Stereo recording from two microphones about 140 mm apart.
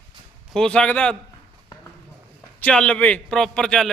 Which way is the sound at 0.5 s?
5° left (ahead or behind).